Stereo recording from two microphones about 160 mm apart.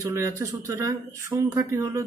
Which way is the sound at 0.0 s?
20° right (ahead or behind).